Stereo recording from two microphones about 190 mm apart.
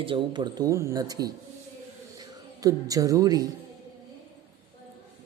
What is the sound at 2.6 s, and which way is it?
Speech, 20° right (ahead or behind).